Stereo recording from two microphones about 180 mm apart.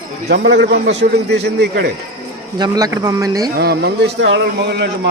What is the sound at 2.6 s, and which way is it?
Speech, 20° right (ahead or behind).